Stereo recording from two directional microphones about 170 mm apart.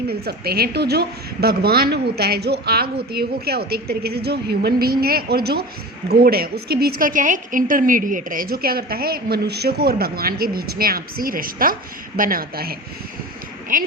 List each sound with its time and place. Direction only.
0.1 s a woman's voice: 65° right (ahead or behind)
13.7 s a woman's voice: 50° right (ahead or behind)